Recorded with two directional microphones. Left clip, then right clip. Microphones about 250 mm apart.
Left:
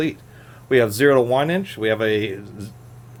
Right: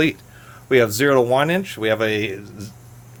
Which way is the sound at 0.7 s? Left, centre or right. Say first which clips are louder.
Even; centre.